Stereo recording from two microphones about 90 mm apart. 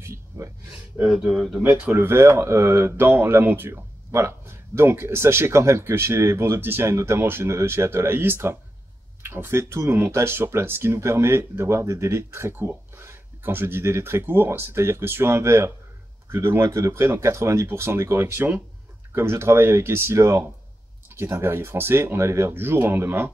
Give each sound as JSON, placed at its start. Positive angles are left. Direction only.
{"t": 0.3, "sound": "a sound", "side_deg": -30}
{"t": 1.0, "sound": "speech", "side_deg": -20}
{"t": 1.3, "sound": "speech", "side_deg": 0}
{"t": 1.6, "sound": "speech", "side_deg": -25}